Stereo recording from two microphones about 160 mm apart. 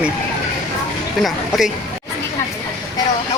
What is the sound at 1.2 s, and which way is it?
Speech, centre (ahead or behind).